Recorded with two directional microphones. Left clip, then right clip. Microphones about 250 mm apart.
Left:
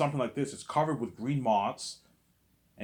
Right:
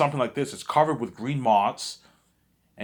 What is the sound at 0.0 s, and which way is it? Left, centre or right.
Speech, right.